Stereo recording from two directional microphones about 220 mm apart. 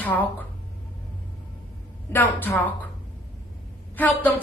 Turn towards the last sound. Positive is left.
turn(degrees=5)  # may be behind; listen again after turning